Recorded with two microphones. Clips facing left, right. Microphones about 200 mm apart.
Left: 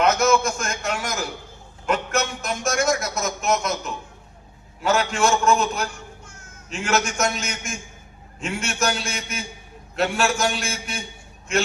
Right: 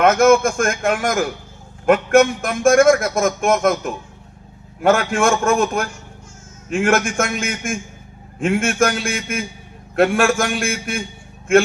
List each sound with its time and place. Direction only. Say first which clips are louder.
0.0 s a man's voice: right 6 dB; 50° right (ahead or behind)